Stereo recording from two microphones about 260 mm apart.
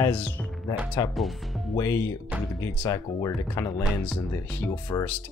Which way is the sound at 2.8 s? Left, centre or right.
Centre.